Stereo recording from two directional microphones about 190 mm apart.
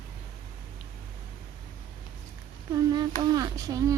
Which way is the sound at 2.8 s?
20° right (ahead or behind).